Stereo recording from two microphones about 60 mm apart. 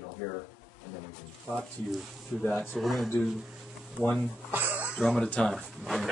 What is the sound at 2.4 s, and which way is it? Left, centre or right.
Speech, left.